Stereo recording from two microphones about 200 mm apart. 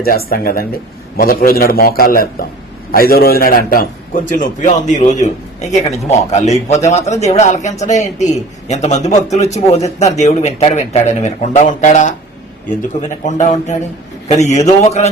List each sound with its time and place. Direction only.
0.0 s a man's voice: 50° left (ahead or behind)